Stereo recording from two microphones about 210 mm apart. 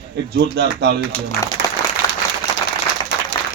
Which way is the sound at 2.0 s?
15° left (ahead or behind).